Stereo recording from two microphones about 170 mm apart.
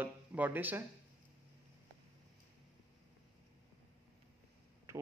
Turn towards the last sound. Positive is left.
turn(degrees=-15)  # may be behind; listen again after turning